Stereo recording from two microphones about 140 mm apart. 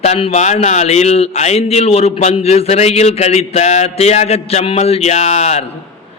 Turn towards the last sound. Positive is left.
turn(degrees=50)  # may be behind; listen again after turning